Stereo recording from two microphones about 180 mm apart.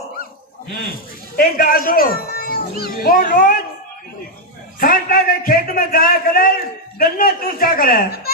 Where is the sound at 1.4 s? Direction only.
50° left (ahead or behind).